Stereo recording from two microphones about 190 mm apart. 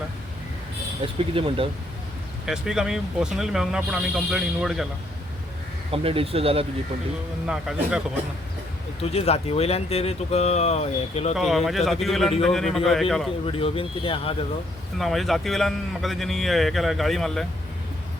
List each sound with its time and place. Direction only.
1.0 s speech: 30° right (ahead or behind)
2.5 s a man's voice: 5° right (ahead or behind)
5.9 s speech: 30° right (ahead or behind)
7.4 s a man's voice: 5° right (ahead or behind)
9.0 s speech: 35° left (ahead or behind)
11.3 s a man's voice: centre (ahead or behind)
13.4 s speech: 30° left (ahead or behind)
14.9 s a man's voice: centre (ahead or behind)